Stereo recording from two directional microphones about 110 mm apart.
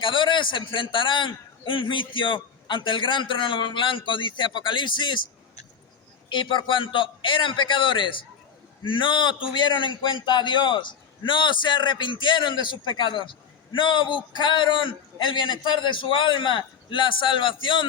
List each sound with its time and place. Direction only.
0.0 s a man's voice: 50° left (ahead or behind)
6.2 s a man's voice: 45° left (ahead or behind)